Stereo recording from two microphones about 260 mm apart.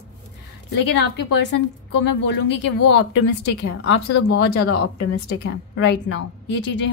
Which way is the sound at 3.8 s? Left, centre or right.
Left.